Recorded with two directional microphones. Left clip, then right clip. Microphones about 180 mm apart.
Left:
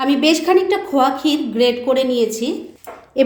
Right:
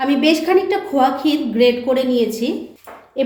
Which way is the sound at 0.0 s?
25° left (ahead or behind).